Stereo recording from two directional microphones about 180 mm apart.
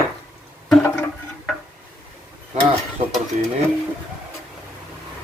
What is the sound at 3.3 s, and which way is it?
Speech, 45° right (ahead or behind).